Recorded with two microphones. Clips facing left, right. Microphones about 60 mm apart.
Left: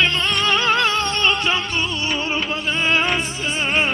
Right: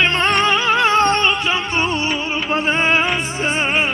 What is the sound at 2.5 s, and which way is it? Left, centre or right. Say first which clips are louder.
Music: right 5 dB; right.